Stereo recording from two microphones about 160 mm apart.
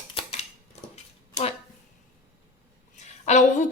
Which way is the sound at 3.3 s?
45° left (ahead or behind).